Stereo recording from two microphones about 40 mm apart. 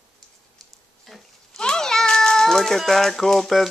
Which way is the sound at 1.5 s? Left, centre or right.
Centre.